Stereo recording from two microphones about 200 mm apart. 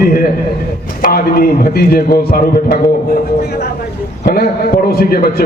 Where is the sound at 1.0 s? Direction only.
50° left (ahead or behind).